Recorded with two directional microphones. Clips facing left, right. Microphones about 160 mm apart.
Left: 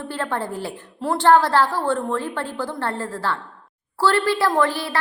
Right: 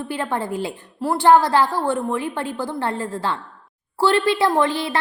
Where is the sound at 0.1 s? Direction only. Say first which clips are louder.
Right 1 dB; 15° right (ahead or behind).